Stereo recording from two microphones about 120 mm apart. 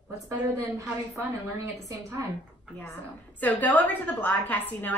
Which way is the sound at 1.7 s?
25° right (ahead or behind).